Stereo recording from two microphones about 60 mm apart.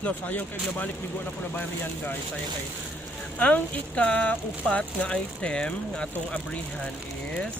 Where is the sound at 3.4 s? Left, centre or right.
Left.